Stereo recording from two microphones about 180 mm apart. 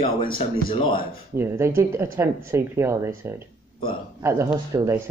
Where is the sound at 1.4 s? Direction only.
15° right (ahead or behind).